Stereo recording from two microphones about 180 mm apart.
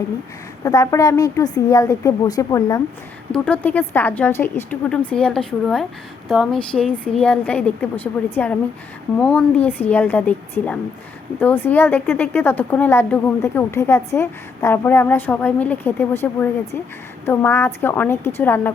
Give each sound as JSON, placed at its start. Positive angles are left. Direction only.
{"t": 0.6, "sound": "a woman's voice", "side_deg": 20}
{"t": 3.3, "sound": "speech", "side_deg": 5}